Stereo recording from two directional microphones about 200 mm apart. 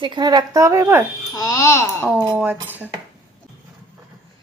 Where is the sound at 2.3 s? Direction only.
10° right (ahead or behind).